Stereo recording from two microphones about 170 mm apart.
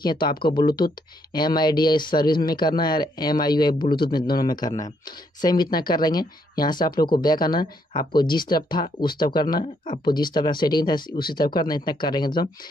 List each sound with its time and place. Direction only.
0.0 s speech: 25° left (ahead or behind)